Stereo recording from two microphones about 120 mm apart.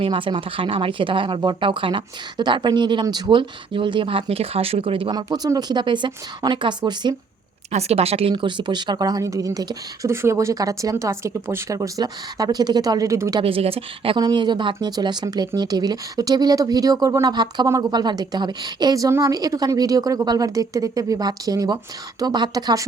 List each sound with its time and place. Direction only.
0.0 s speech: 45° right (ahead or behind)
5.1 s speech: 35° right (ahead or behind)
7.7 s speech: 60° right (ahead or behind); by 13.4 s 25° right (ahead or behind)
13.4 s speech: 50° right (ahead or behind)
14.2 s speech: 35° right (ahead or behind)